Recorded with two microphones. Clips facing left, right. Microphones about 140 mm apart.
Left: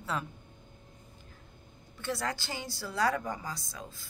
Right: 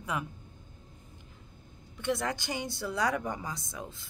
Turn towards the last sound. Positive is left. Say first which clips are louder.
# right 3 dB
turn(degrees=-20)  # may be behind; listen again after turning